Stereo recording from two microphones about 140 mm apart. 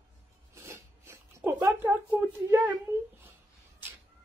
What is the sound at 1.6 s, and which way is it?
A woman's voice, 20° right (ahead or behind).